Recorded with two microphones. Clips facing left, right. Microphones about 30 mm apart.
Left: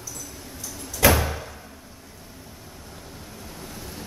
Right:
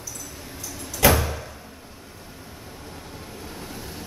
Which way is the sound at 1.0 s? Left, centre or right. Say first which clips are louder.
Even; centre.